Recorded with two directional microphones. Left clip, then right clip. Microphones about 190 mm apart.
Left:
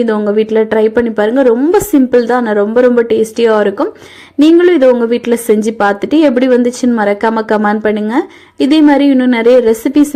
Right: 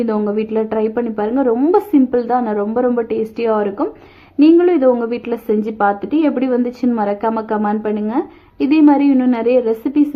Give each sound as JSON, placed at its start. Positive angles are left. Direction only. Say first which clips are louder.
{"t": 0.0, "sound": "a woman's voice", "louder": "left 7 dB", "side_deg": 20}